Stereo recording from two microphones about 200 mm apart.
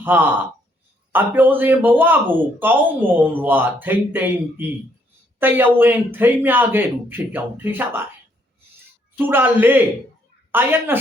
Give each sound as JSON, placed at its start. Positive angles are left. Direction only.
{"t": 0.0, "sound": "a man's voice", "side_deg": -10}
{"t": 9.1, "sound": "a man's voice", "side_deg": -10}